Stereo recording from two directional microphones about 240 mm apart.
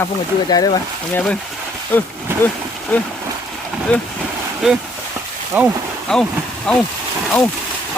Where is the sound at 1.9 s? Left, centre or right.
Centre.